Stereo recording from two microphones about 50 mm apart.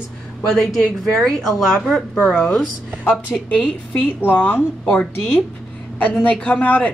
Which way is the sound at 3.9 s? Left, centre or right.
Left.